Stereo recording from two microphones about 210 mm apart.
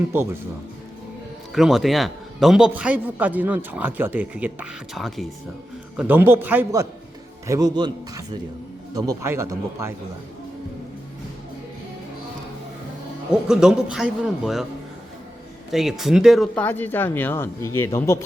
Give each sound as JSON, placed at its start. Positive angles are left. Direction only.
{"t": 0.1, "sound": "a man's voice", "side_deg": -10}
{"t": 1.5, "sound": "a man's voice", "side_deg": 0}
{"t": 13.3, "sound": "a man's voice", "side_deg": -5}
{"t": 15.7, "sound": "speech", "side_deg": 0}